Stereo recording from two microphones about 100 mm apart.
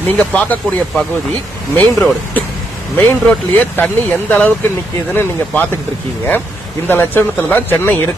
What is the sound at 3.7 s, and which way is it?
Speech, 15° left (ahead or behind).